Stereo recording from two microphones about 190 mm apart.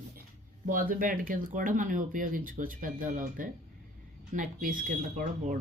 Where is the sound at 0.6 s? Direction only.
45° right (ahead or behind).